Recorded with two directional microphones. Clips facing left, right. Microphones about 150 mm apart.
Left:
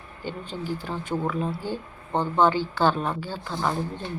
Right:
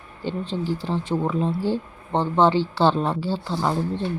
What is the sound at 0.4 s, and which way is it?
Speech, 90° right.